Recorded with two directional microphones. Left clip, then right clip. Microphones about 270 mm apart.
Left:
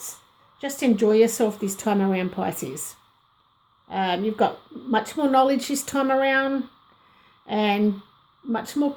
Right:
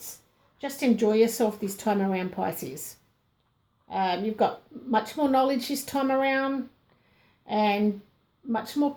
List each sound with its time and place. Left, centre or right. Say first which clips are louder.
0.6 s speech: left 3 dB; left
3.8 s speech: left 3 dB; left